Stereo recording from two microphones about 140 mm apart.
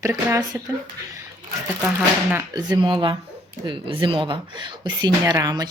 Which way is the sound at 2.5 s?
30° right (ahead or behind).